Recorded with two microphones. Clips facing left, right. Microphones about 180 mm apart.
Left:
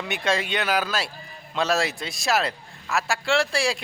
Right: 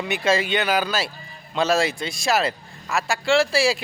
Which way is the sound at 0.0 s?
Centre (ahead or behind).